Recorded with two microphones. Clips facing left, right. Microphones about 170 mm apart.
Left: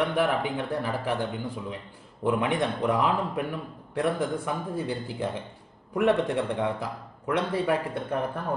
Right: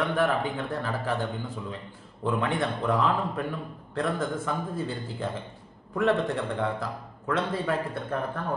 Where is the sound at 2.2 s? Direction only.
15° left (ahead or behind).